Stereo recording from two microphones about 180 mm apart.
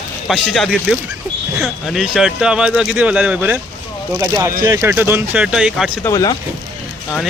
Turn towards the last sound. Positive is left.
turn(degrees=20)  # may be behind; listen again after turning